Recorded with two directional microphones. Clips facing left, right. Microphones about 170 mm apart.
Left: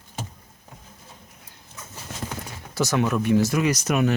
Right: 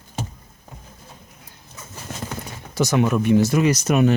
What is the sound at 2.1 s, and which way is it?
Clip-clop, 50° right (ahead or behind).